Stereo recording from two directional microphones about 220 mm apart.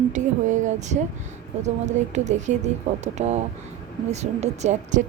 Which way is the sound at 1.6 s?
30° right (ahead or behind).